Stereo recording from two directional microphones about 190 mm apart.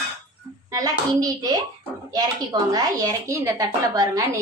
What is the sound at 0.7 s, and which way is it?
Speech, 20° right (ahead or behind).